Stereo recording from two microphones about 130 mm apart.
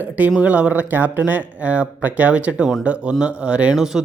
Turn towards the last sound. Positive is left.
turn(degrees=-5)  # may be behind; listen again after turning